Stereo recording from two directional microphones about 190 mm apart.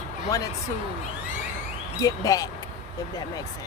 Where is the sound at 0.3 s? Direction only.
15° left (ahead or behind).